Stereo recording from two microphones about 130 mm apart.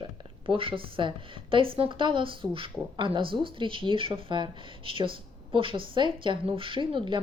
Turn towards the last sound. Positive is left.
turn(degrees=-40)  # may be behind; listen again after turning